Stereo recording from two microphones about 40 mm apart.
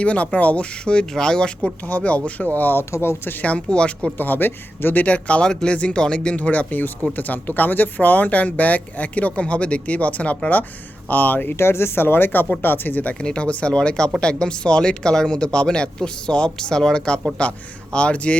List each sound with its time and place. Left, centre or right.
0.0 s speech: left
1.8 s speech: left
2.7 s speech: left
3.5 s speech: left
4.2 s speech: left
5.0 s speech: left
11.5 s speech: left
13.1 s speech: left